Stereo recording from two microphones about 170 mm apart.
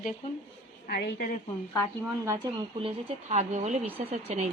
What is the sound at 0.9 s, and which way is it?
Speech, 70° left (ahead or behind).